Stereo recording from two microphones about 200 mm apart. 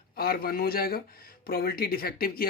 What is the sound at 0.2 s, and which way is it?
Speech, 50° left (ahead or behind).